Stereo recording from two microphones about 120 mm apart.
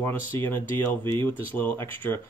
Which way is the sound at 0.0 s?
20° left (ahead or behind).